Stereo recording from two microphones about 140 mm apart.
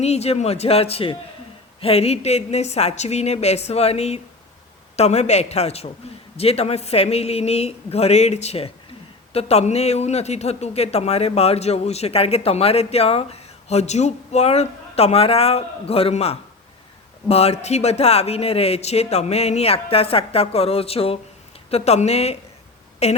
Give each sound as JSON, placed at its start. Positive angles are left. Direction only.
{"t": 0.0, "sound": "speech", "side_deg": 50}